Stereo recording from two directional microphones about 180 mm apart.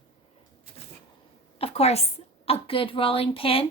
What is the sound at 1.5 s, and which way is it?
A woman's voice, 35° left (ahead or behind).